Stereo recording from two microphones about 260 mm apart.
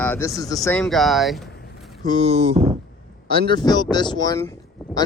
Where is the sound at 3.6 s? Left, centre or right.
Centre.